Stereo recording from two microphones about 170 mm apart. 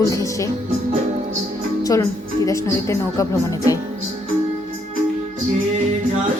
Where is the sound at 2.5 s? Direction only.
15° left (ahead or behind).